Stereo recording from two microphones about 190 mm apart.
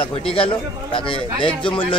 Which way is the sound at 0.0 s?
30° left (ahead or behind).